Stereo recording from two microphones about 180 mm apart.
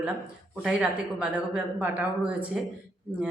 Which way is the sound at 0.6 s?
5° right (ahead or behind).